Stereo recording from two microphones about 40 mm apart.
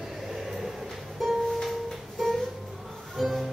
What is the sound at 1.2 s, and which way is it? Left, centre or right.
Music, centre.